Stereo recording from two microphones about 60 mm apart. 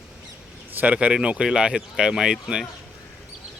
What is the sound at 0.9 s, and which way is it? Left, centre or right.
Speech, centre.